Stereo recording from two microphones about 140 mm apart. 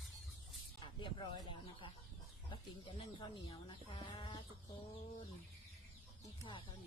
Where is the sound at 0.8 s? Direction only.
35° left (ahead or behind).